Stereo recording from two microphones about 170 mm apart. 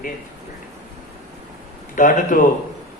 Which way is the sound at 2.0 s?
50° left (ahead or behind).